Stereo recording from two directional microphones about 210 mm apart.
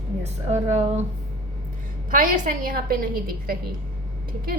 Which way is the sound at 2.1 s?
40° right (ahead or behind).